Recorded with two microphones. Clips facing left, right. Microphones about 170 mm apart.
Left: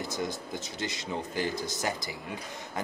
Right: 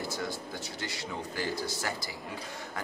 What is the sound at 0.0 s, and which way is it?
Speech, 20° left (ahead or behind).